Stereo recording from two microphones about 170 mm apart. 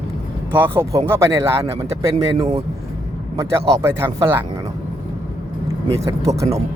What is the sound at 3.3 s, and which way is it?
Speech, 20° right (ahead or behind).